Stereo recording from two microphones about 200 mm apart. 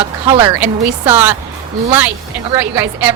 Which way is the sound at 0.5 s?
10° right (ahead or behind).